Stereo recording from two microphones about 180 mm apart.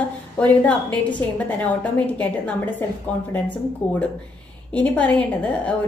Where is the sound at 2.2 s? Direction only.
10° left (ahead or behind).